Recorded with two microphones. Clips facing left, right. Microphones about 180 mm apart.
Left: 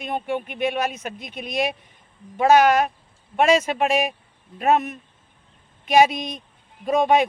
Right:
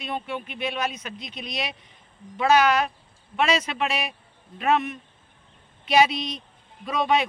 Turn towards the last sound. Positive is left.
turn(degrees=45)  # may be behind; listen again after turning